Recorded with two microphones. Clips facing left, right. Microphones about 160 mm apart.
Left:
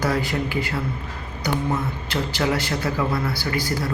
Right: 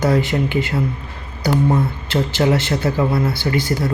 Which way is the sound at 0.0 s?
25° right (ahead or behind).